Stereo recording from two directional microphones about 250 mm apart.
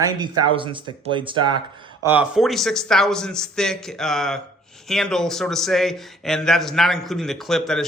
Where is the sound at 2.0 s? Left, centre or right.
Centre.